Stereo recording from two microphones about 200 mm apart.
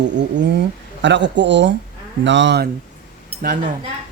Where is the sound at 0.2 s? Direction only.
60° right (ahead or behind).